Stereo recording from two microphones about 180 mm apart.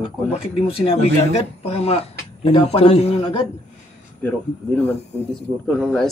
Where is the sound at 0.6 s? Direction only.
30° left (ahead or behind).